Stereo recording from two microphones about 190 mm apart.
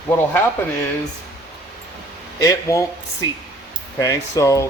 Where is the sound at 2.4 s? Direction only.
15° left (ahead or behind).